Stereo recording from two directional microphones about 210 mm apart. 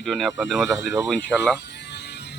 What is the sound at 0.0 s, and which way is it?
Speech, centre (ahead or behind).